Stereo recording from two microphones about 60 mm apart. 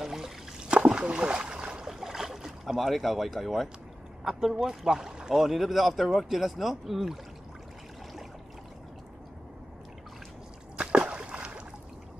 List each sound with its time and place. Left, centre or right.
0.0 s splash: centre
1.9 s boat: centre
4.2 s speech: centre
10.8 s a sound: centre